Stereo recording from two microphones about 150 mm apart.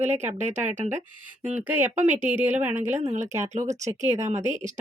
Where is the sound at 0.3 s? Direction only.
50° right (ahead or behind).